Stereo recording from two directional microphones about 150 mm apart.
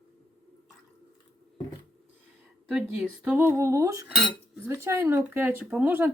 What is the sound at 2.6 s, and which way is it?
Speech, 5° right (ahead or behind).